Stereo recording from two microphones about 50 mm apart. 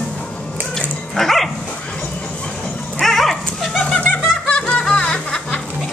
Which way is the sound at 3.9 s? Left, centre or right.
Left.